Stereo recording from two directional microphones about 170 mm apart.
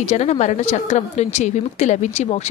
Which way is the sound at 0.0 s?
40° left (ahead or behind).